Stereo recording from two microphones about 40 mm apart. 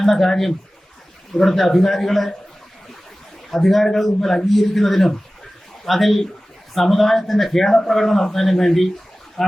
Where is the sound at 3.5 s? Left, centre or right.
Centre.